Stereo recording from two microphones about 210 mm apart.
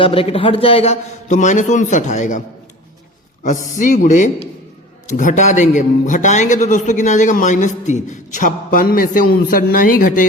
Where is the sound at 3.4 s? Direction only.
35° left (ahead or behind).